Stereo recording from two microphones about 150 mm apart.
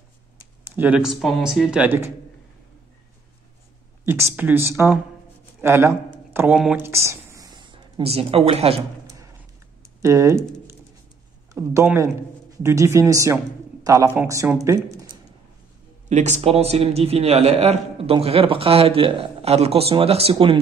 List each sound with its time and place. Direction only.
0.7 s speech: 10° right (ahead or behind)
4.0 s speech: 15° right (ahead or behind)
6.8 s a sound: 20° right (ahead or behind)
8.0 s a man's voice: 40° right (ahead or behind)
10.0 s speech: 20° right (ahead or behind)
16.1 s a man's voice: 50° right (ahead or behind)